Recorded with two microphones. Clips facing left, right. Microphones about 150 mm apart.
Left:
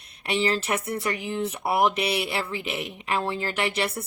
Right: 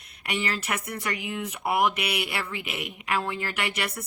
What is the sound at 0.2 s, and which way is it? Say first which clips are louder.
Speech: left 5 dB; 30° left (ahead or behind).